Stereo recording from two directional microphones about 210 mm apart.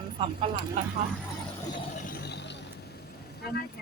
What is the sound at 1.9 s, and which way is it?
Vehicle, 40° left (ahead or behind).